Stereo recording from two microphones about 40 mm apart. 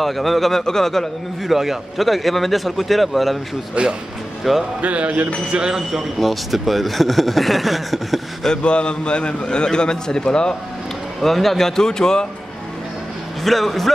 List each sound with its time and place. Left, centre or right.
0.0 s speech: centre
1.5 s speech: centre
3.8 s speech: right
4.4 s speech: centre
4.8 s speech: right
5.5 s speech: centre
6.1 s speech: centre
8.6 s a man's voice: left
11.1 s speech: centre
13.4 s speech: centre